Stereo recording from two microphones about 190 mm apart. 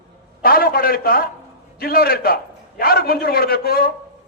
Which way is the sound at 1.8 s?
50° left (ahead or behind).